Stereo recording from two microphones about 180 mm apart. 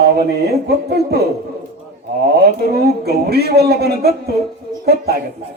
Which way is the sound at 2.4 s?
60° right (ahead or behind).